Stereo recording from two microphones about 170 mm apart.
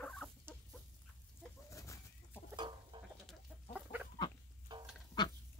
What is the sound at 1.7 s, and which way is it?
Chicken, 20° left (ahead or behind).